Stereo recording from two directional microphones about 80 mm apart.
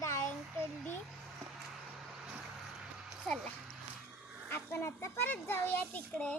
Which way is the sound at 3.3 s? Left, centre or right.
Centre.